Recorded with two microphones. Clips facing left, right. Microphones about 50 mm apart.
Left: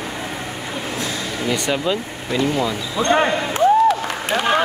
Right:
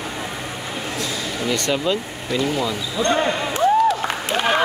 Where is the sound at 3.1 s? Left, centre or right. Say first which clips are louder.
Left 4 dB; left.